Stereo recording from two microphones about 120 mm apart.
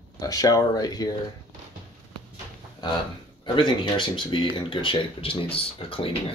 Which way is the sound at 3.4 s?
45° left (ahead or behind).